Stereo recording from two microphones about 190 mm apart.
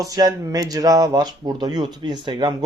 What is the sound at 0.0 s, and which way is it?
Speech, 20° right (ahead or behind).